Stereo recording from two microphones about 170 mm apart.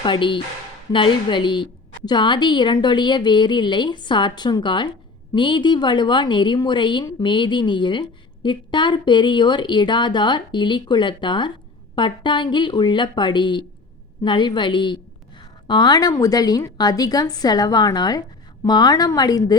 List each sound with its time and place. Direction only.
0.0 s a woman's voice: 30° left (ahead or behind)